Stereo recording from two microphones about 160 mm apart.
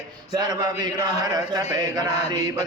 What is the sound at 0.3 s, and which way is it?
Mantra, 25° right (ahead or behind).